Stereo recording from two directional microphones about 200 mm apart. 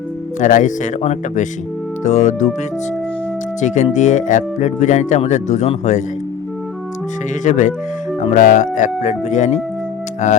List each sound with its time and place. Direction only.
0.3 s speech: 40° left (ahead or behind)
3.6 s speech: 35° left (ahead or behind)
7.4 s speech: 35° left (ahead or behind)